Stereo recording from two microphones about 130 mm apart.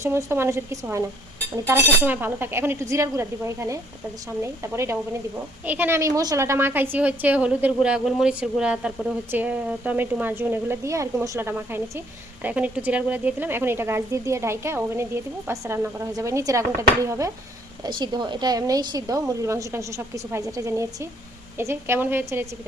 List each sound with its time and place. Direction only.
0.0 s a woman's voice: 20° right (ahead or behind)
17.8 s a woman's voice: 35° right (ahead or behind); by 22.4 s 20° right (ahead or behind)